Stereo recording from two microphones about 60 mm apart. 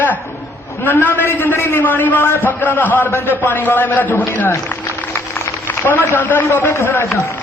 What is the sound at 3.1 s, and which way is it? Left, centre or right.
Speech, left.